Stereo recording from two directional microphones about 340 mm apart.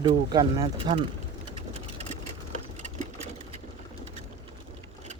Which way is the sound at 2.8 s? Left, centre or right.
Centre.